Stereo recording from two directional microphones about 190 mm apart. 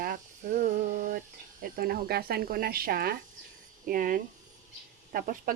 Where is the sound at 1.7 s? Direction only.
50° right (ahead or behind).